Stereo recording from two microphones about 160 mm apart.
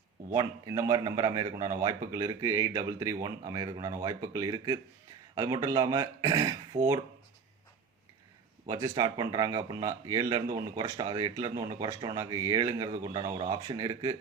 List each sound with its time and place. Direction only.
0.3 s speech: 25° right (ahead or behind)
8.6 s speech: 25° right (ahead or behind)